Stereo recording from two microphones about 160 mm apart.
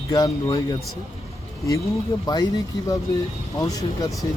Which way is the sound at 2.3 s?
25° left (ahead or behind).